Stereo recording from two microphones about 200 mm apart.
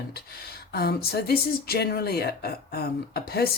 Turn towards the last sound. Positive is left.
turn(degrees=50)  # may be behind; listen again after turning